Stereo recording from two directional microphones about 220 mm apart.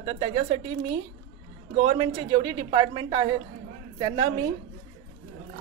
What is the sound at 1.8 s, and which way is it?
A woman's voice, 30° right (ahead or behind).